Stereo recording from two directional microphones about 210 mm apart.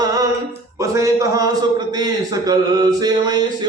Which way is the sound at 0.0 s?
15° right (ahead or behind).